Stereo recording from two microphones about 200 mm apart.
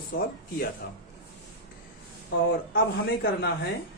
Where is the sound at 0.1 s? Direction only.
50° left (ahead or behind).